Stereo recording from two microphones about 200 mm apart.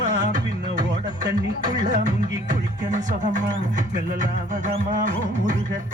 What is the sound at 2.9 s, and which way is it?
Music, 40° right (ahead or behind).